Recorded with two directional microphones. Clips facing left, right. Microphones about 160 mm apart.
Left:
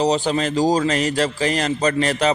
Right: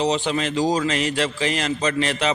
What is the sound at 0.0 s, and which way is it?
A man's voice, 40° left (ahead or behind).